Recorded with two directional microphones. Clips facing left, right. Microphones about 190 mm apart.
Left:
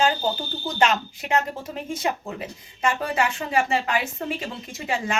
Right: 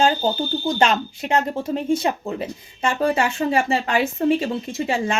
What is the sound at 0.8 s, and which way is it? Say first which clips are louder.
Speech: left 1 dB; 30° right (ahead or behind).